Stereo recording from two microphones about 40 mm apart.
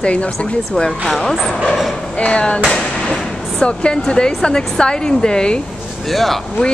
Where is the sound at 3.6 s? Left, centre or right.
Left.